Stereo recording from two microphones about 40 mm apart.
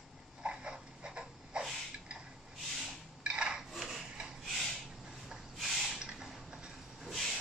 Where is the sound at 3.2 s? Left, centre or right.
Right.